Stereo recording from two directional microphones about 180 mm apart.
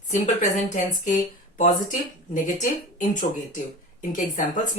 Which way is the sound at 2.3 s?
45° left (ahead or behind).